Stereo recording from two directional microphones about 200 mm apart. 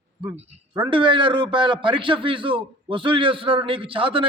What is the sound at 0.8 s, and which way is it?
A man's voice, 25° right (ahead or behind).